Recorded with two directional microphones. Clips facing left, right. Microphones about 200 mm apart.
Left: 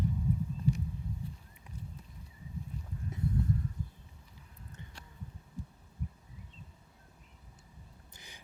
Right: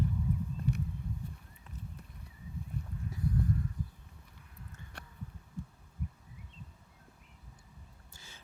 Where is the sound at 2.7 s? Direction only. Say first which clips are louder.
Right 3 dB; 55° right (ahead or behind).